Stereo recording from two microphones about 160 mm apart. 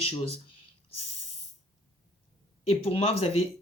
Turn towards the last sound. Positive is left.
turn(degrees=35)  # may be behind; listen again after turning